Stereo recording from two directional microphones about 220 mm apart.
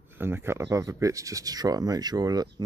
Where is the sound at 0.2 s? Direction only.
10° right (ahead or behind).